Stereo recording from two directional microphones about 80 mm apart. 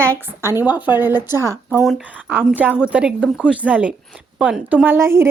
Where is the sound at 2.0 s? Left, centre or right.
Centre.